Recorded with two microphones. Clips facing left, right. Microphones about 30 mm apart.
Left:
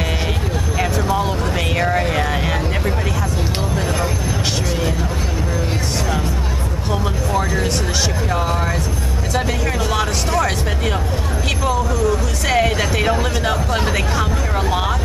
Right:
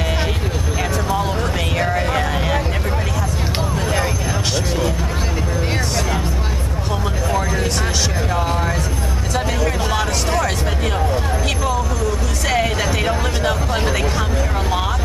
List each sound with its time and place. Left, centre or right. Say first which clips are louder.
1.8 s vehicle: left 1 dB; centre
7.3 s vehicle: left 2 dB; centre
12.4 s music: left 2 dB; centre